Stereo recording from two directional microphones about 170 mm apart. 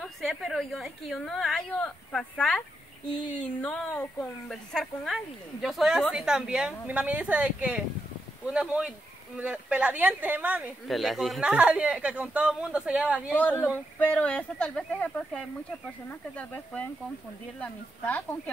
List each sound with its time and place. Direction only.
0.0 s a woman's voice: centre (ahead or behind)
13.3 s speech: 10° left (ahead or behind)